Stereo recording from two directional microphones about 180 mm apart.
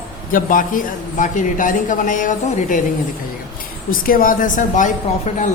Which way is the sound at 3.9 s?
50° left (ahead or behind).